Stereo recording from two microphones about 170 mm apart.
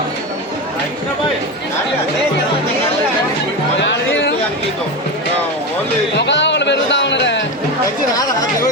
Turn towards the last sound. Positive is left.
turn(degrees=90)